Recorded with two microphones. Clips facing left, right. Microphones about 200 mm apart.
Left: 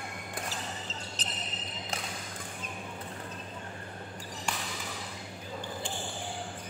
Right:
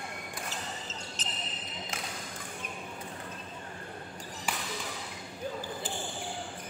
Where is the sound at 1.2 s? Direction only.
35° left (ahead or behind).